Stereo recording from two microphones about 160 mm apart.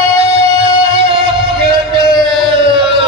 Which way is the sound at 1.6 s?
30° right (ahead or behind).